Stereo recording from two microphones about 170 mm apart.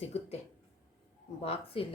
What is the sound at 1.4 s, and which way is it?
Speech, 35° left (ahead or behind).